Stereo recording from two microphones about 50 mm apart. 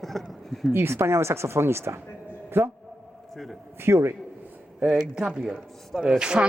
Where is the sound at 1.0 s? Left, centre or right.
Right.